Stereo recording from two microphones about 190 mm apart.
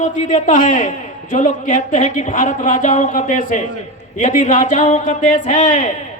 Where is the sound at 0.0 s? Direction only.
40° left (ahead or behind).